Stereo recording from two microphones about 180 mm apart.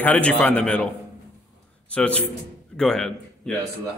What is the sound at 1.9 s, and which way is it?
A man's voice, 5° left (ahead or behind).